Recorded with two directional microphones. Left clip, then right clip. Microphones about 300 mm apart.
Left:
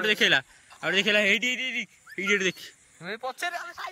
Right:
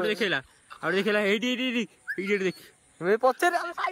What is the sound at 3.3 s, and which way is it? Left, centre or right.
Speech, right.